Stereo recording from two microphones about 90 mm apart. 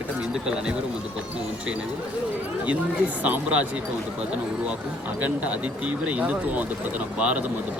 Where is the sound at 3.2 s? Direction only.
15° right (ahead or behind).